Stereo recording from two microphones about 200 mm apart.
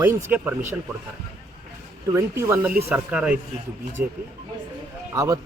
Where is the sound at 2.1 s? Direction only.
15° right (ahead or behind).